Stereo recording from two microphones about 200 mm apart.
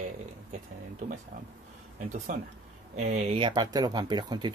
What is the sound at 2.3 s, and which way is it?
Speech, 40° right (ahead or behind).